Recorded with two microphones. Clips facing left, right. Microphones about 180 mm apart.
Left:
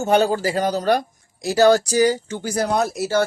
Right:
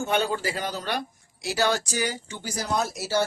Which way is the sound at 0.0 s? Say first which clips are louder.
Left 8 dB; 40° left (ahead or behind).